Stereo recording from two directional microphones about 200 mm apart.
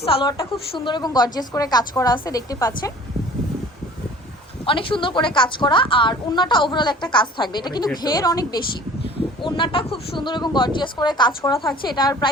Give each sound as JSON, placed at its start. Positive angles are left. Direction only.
{"t": 0.0, "sound": "a woman's voice", "side_deg": 25}
{"t": 4.6, "sound": "a woman's voice", "side_deg": 25}